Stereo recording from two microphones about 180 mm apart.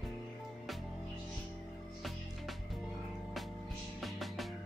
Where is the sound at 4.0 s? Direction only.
Centre (ahead or behind).